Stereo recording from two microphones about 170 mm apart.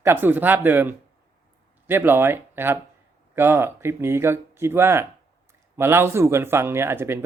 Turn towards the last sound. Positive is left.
turn(degrees=-15)  # may be behind; listen again after turning